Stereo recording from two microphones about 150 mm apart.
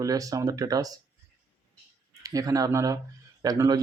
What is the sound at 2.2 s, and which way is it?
Speech, 25° right (ahead or behind).